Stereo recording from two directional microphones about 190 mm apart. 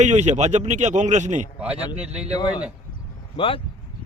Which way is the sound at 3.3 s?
30° left (ahead or behind).